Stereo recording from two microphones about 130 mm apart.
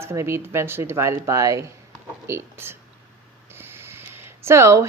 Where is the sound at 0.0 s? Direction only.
20° right (ahead or behind).